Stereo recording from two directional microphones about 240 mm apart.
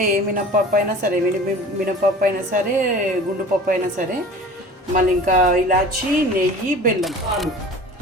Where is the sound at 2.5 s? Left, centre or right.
Right.